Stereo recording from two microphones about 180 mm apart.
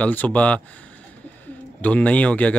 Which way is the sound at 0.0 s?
10° left (ahead or behind).